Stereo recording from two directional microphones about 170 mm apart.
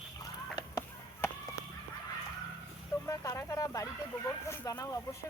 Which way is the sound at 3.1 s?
20° left (ahead or behind).